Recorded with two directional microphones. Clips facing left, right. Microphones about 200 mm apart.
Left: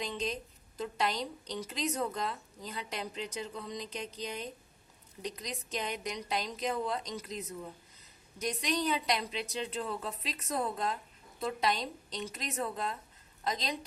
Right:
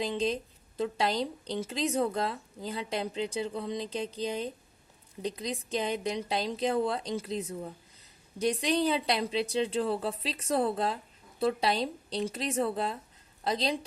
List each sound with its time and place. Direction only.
0.0 s speech: 30° right (ahead or behind)